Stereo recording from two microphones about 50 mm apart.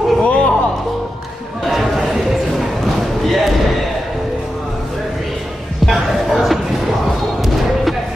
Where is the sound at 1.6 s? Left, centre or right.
Centre.